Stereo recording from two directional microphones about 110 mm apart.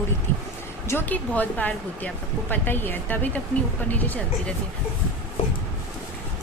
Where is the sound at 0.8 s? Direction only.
20° left (ahead or behind).